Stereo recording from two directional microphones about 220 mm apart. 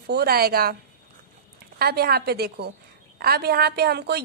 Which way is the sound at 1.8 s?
45° right (ahead or behind).